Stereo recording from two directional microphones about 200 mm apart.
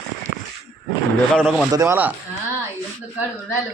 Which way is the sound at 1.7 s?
15° right (ahead or behind).